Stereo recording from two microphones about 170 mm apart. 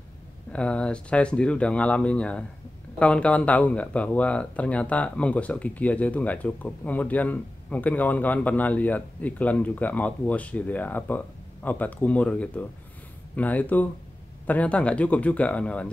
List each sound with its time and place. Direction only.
0.5 s speech: 5° left (ahead or behind)